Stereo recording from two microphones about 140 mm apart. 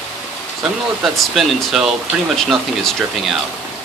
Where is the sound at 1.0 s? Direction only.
Centre (ahead or behind).